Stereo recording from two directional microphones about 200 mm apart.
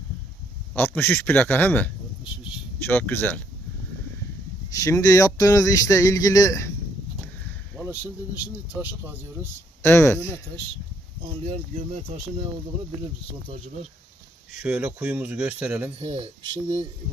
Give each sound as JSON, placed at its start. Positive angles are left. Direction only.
{"t": 0.7, "sound": "speech", "side_deg": 10}
{"t": 4.7, "sound": "speech", "side_deg": 15}
{"t": 7.8, "sound": "a sound", "side_deg": -10}
{"t": 8.7, "sound": "speech", "side_deg": -10}
{"t": 9.8, "sound": "speech", "side_deg": 15}
{"t": 11.4, "sound": "speech", "side_deg": -30}
{"t": 14.6, "sound": "speech", "side_deg": -5}
{"t": 16.0, "sound": "speech", "side_deg": -30}